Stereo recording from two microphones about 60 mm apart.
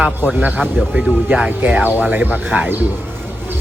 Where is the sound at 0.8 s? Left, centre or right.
Centre.